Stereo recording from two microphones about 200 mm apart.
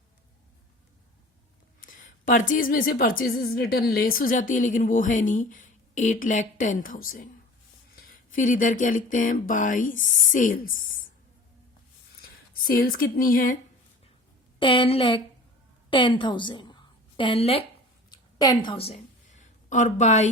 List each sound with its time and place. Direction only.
1.8 s speech: 40° left (ahead or behind)
12.6 s speech: 45° left (ahead or behind)
14.6 s a woman's voice: 25° left (ahead or behind)
18.1 s a sound: 20° left (ahead or behind); by 20.3 s 35° left (ahead or behind)